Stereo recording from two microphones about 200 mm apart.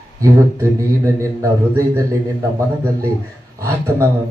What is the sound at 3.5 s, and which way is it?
Speech, 15° right (ahead or behind).